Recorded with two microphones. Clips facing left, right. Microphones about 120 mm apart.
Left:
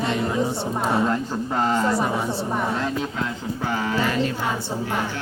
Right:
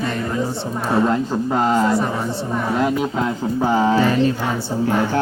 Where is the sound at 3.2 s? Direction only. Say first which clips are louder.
Right 7 dB; 25° right (ahead or behind).